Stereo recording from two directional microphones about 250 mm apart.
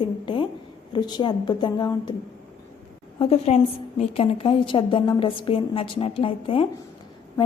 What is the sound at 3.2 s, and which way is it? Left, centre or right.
A woman's voice, left.